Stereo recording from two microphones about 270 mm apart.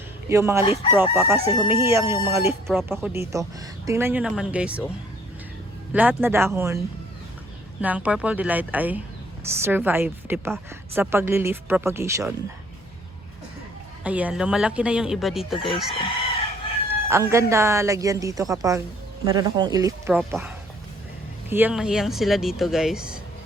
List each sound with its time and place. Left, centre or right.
0.3 s a woman's voice: centre
0.6 s crowing: centre
0.9 s a woman's voice: centre
2.6 s speech: centre
5.9 s a woman's voice: centre
14.0 s speech: centre
16.9 s a woman's voice: centre
21.5 s speech: centre